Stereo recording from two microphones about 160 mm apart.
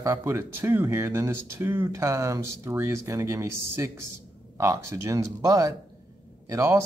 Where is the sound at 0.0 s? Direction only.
15° right (ahead or behind).